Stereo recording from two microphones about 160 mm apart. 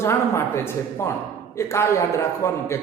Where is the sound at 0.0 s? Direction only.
15° left (ahead or behind).